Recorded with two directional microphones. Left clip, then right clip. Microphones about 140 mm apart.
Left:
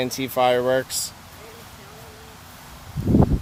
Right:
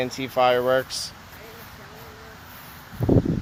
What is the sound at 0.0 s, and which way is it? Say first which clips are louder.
Speech: even; 30° left (ahead or behind).